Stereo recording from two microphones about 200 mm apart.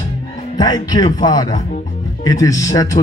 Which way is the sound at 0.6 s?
20° left (ahead or behind).